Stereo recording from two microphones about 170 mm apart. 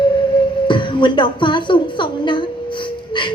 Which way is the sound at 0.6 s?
30° left (ahead or behind).